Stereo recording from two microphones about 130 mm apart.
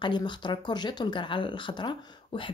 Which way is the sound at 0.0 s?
35° left (ahead or behind).